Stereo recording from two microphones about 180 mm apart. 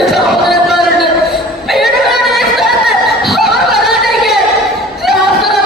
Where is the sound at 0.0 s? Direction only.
Centre (ahead or behind).